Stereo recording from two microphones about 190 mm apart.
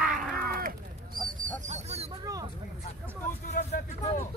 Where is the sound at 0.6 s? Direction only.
50° right (ahead or behind).